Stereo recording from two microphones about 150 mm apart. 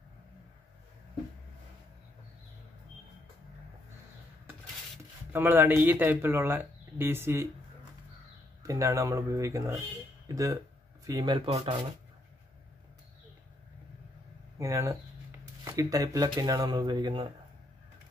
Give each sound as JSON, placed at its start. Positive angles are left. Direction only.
{"t": 5.3, "sound": "speech", "side_deg": -15}
{"t": 8.6, "sound": "speech", "side_deg": -20}
{"t": 14.6, "sound": "speech", "side_deg": -20}